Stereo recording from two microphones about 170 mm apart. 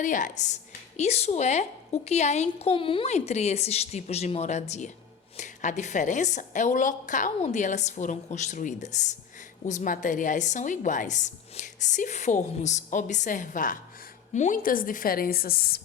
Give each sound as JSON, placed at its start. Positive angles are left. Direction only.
{"t": 0.0, "sound": "a woman's voice", "side_deg": 50}